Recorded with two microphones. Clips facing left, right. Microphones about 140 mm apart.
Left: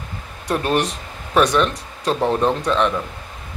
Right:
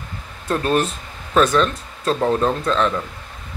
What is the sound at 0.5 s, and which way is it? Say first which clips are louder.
Speech: right 1 dB; 15° left (ahead or behind).